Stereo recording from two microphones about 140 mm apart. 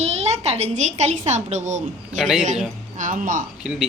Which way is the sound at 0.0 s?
50° right (ahead or behind).